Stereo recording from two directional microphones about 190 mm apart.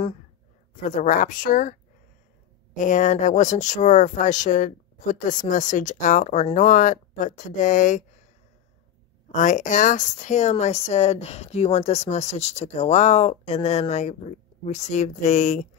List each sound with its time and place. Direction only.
0.8 s speech: 40° left (ahead or behind)
9.3 s speech: 40° left (ahead or behind)